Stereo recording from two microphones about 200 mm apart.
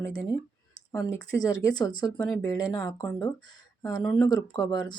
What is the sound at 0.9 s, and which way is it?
Speech, 15° left (ahead or behind).